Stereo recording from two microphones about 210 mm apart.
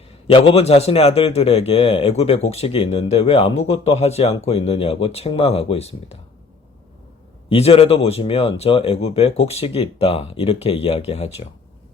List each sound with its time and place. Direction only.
0.3 s a man's voice: 25° left (ahead or behind)
7.5 s a man's voice: 30° left (ahead or behind)